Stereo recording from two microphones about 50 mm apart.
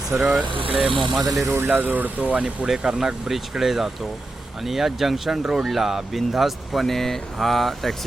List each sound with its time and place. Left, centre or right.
0.1 s speech: right
0.8 s speech: centre
1.5 s speech: right
2.6 s speech: centre